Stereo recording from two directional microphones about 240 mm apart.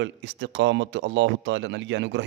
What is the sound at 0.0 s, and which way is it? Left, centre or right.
Speech, right.